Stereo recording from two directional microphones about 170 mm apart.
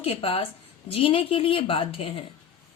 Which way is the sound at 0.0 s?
35° left (ahead or behind).